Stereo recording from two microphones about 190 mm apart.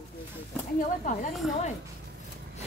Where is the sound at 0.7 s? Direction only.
45° left (ahead or behind).